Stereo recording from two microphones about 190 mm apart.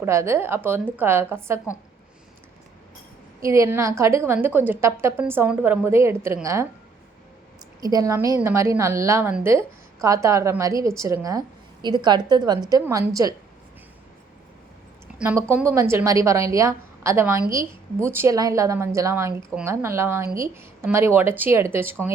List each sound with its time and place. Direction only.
0.0 s a woman's voice: 15° right (ahead or behind)
3.4 s a woman's voice: 15° right (ahead or behind)
7.8 s a woman's voice: 20° right (ahead or behind)
15.2 s a woman's voice: 10° right (ahead or behind)